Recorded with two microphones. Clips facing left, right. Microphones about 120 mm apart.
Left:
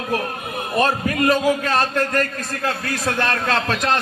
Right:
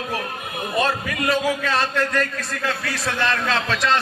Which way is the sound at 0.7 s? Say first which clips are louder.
Left 4 dB; 45° left (ahead or behind).